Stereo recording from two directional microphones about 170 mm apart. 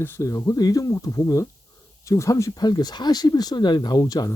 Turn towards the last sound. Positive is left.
turn(degrees=20)  # may be behind; listen again after turning